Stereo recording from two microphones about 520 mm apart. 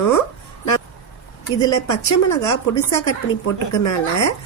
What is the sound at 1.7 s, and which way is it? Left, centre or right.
A woman's voice, left.